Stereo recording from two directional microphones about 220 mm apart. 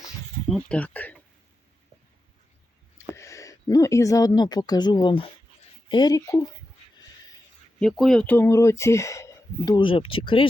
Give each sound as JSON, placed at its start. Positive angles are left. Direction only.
{"t": 0.4, "sound": "a sound", "side_deg": 5}
{"t": 3.2, "sound": "speech", "side_deg": 15}
{"t": 7.8, "sound": "speech", "side_deg": 0}